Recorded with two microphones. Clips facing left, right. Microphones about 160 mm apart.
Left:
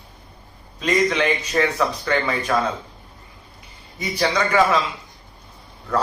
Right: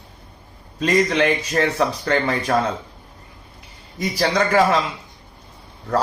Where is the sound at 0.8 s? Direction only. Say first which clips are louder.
Right 2 dB; 35° right (ahead or behind).